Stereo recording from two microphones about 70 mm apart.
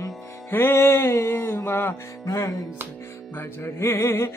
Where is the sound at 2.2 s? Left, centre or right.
Left.